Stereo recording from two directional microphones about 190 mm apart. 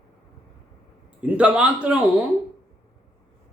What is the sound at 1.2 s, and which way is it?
Speech, 5° right (ahead or behind).